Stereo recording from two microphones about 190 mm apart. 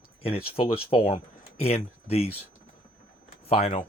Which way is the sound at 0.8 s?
30° left (ahead or behind).